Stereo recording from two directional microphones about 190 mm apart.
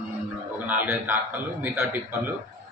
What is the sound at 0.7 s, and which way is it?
Speech, 10° right (ahead or behind).